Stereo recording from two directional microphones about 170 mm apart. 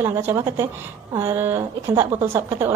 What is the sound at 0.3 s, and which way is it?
A woman's voice, 15° right (ahead or behind).